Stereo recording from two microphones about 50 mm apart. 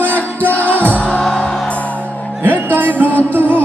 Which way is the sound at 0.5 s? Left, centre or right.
Left.